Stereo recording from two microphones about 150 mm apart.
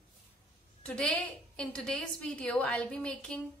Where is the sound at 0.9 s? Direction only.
10° left (ahead or behind).